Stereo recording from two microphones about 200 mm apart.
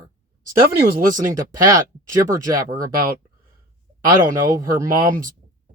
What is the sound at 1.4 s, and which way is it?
Speech, 15° right (ahead or behind).